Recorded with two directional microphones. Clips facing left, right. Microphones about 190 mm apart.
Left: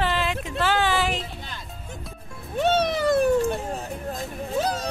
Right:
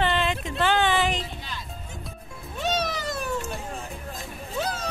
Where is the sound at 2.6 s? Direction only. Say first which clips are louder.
Left 6 dB; 60° left (ahead or behind).